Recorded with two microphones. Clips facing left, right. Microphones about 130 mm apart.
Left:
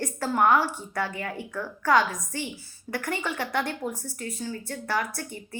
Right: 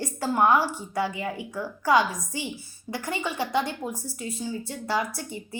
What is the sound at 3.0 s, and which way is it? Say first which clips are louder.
Speech: right 2 dB; 20° right (ahead or behind).